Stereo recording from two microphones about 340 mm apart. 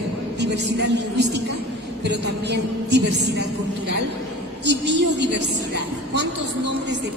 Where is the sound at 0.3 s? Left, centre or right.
Right.